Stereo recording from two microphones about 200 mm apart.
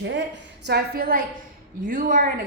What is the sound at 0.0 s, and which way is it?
Speech, 65° right (ahead or behind).